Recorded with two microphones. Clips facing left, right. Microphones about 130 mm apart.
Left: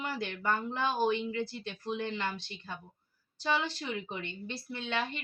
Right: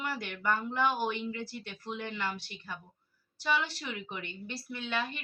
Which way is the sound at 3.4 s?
25° left (ahead or behind).